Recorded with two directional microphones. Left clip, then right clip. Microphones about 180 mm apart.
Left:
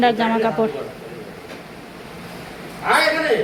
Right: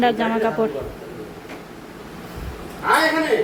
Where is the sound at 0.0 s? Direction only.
10° right (ahead or behind).